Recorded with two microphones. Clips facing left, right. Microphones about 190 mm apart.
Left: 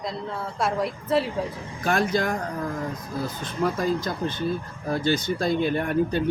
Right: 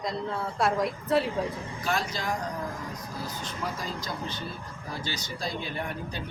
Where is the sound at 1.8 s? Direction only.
55° left (ahead or behind).